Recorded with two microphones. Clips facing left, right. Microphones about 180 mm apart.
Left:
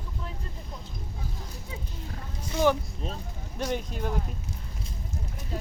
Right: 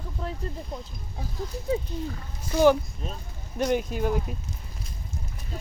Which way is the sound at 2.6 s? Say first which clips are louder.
Right 5 dB; 5° right (ahead or behind).